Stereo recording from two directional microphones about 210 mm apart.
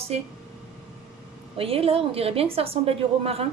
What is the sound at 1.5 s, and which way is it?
A woman's voice, 25° right (ahead or behind).